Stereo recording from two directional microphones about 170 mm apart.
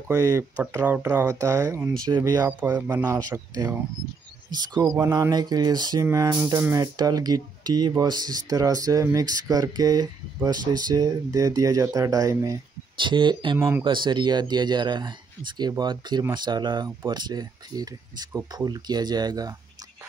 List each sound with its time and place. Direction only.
0.1 s speech: 20° right (ahead or behind)
13.6 s speech: 15° right (ahead or behind)
13.8 s speech: 25° right (ahead or behind)